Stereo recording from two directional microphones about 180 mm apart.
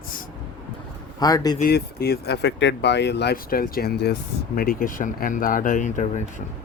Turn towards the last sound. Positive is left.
turn(degrees=45)  # may be behind; listen again after turning